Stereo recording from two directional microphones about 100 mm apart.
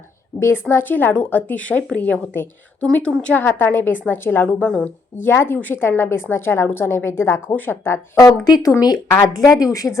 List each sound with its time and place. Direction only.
0.3 s speech: 25° left (ahead or behind)
2.8 s a woman's voice: 5° left (ahead or behind); by 8.3 s 25° left (ahead or behind)
8.4 s a woman's voice: 40° left (ahead or behind)